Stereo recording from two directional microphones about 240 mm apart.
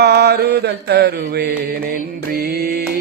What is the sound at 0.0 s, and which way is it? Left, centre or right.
Mantra, right.